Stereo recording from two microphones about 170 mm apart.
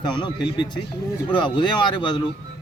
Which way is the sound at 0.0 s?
25° left (ahead or behind).